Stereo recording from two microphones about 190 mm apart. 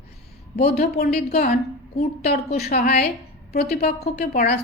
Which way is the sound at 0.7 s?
55° left (ahead or behind).